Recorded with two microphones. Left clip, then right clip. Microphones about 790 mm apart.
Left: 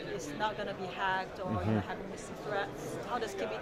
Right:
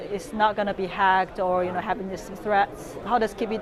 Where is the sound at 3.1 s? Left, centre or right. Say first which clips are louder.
Right 14 dB; right.